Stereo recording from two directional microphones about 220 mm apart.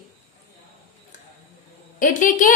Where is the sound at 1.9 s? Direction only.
35° left (ahead or behind).